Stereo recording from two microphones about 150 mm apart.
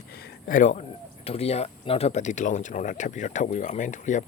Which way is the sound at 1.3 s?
40° left (ahead or behind).